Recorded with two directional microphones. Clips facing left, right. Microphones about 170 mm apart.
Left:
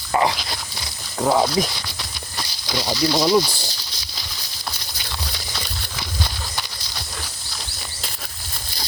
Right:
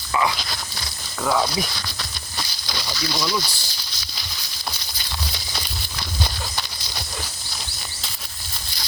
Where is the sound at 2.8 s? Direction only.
30° left (ahead or behind).